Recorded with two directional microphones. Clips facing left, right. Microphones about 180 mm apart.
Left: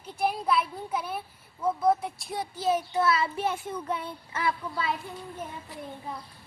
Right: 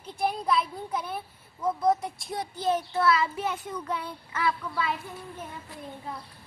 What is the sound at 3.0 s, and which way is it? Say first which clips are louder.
Speech: right 1 dB; 25° left (ahead or behind).